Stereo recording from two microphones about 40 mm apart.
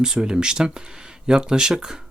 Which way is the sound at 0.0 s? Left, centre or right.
Centre.